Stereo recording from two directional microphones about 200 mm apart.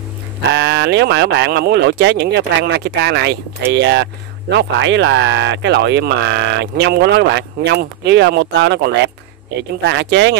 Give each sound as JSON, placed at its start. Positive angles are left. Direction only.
{"t": 0.6, "sound": "speech", "side_deg": -60}